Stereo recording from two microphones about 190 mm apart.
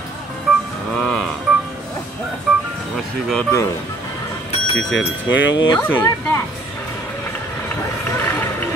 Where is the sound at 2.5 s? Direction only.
Centre (ahead or behind).